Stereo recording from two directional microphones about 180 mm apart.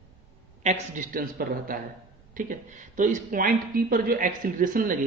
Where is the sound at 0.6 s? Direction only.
50° right (ahead or behind).